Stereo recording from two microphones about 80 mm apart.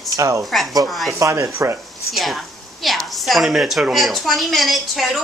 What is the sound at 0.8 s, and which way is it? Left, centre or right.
Speech, centre.